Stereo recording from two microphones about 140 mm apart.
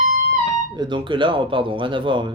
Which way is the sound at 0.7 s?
35° right (ahead or behind).